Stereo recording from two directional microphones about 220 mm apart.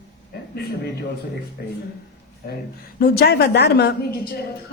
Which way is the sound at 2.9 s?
45° left (ahead or behind).